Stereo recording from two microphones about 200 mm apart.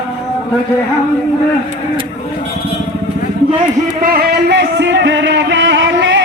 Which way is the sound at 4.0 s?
50° right (ahead or behind).